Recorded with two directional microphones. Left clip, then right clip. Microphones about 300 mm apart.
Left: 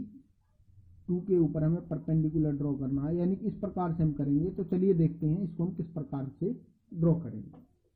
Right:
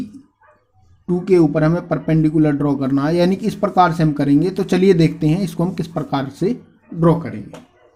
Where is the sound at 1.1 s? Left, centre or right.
Centre.